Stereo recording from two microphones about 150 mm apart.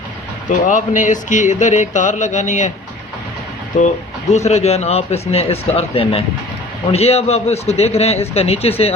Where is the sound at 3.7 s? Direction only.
55° left (ahead or behind).